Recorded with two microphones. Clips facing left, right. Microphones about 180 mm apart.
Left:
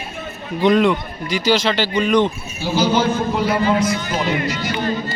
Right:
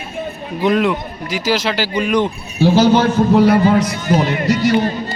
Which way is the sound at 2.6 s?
60° right (ahead or behind).